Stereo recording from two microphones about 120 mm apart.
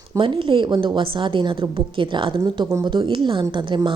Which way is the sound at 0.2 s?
45° right (ahead or behind).